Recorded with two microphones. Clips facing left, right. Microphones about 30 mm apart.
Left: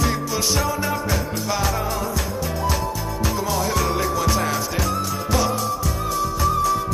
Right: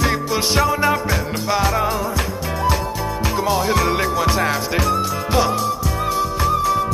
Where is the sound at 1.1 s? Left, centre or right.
Centre.